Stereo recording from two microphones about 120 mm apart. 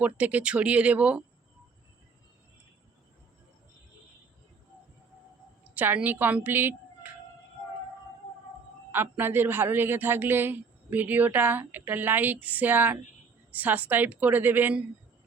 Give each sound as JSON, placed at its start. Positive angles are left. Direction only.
{"t": 0.0, "sound": "a man's voice", "side_deg": -10}
{"t": 5.7, "sound": "a woman's voice", "side_deg": -15}
{"t": 8.9, "sound": "a man's voice", "side_deg": -20}